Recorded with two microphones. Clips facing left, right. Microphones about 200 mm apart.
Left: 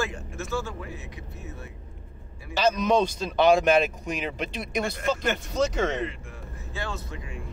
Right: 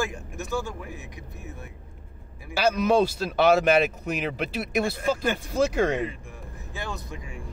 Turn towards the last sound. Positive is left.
turn(degrees=-15)  # may be behind; listen again after turning